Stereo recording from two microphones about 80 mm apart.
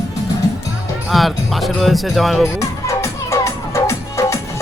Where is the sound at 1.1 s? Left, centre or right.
Centre.